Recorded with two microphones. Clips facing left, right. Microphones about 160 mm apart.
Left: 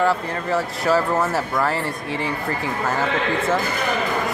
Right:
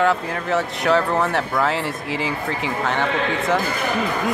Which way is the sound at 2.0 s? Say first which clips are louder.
Even; 90° right.